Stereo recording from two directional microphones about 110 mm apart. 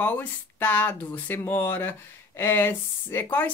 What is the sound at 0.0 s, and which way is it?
Speech, 15° left (ahead or behind).